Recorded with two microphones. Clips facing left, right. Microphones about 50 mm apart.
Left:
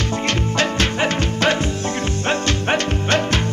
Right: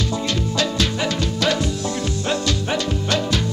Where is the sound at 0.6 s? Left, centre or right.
Left.